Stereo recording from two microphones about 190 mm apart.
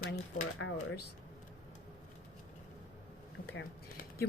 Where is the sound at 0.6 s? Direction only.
70° left (ahead or behind).